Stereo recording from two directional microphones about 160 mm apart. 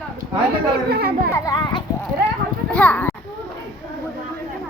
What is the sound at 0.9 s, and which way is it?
Speech, 75° right (ahead or behind).